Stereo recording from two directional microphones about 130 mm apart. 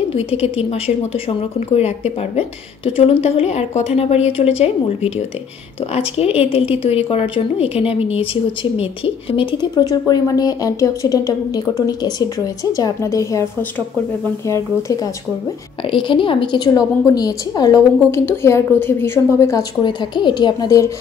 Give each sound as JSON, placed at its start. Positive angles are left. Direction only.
{"t": 0.1, "sound": "a woman's voice", "side_deg": 50}
{"t": 15.8, "sound": "a woman's voice", "side_deg": 40}
{"t": 19.5, "sound": "a woman's voice", "side_deg": 35}